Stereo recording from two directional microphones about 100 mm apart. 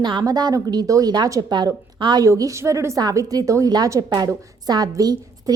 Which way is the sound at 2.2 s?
35° right (ahead or behind).